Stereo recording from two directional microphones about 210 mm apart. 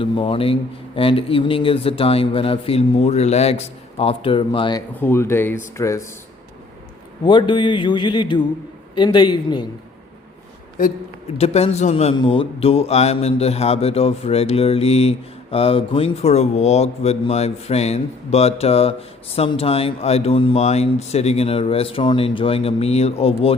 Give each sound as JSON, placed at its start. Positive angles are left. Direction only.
{"t": 0.0, "sound": "a man's voice", "side_deg": 25}
{"t": 4.9, "sound": "speech", "side_deg": 10}
{"t": 7.3, "sound": "a man's voice", "side_deg": 20}
{"t": 11.3, "sound": "a man's voice", "side_deg": 30}